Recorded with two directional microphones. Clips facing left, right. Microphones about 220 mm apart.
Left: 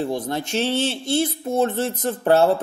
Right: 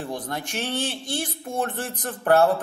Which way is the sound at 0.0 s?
25° left (ahead or behind).